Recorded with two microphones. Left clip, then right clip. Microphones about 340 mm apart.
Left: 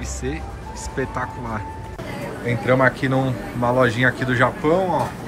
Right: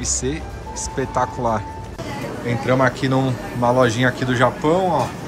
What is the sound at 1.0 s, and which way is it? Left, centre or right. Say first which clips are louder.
Speech: right 6 dB; centre.